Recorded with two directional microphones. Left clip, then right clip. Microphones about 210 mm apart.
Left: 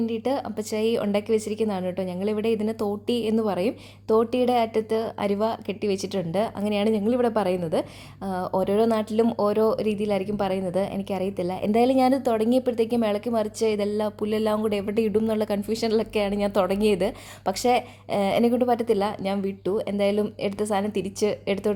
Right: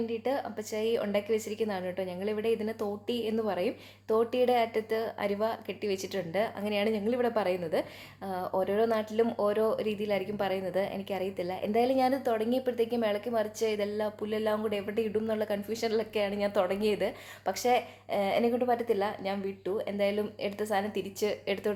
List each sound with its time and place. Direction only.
0.1 s a woman's voice: 35° left (ahead or behind)